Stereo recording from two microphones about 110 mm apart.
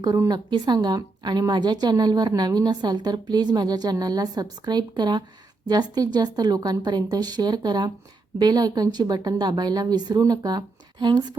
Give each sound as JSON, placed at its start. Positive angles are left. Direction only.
{"t": 0.3, "sound": "a woman's voice", "side_deg": -40}